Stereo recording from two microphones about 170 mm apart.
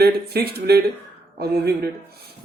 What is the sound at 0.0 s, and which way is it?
Speech, 65° right (ahead or behind).